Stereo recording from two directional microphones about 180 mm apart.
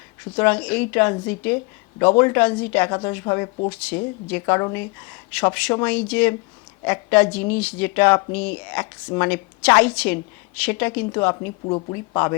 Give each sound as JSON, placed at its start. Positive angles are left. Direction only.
{"t": 0.3, "sound": "a woman's voice", "side_deg": 10}
{"t": 11.6, "sound": "speech", "side_deg": 25}
{"t": 12.1, "sound": "a woman's voice", "side_deg": 15}